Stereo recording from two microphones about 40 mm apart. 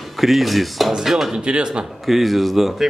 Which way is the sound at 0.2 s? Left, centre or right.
Centre.